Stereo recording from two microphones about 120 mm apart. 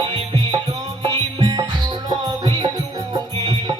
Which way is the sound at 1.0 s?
40° right (ahead or behind).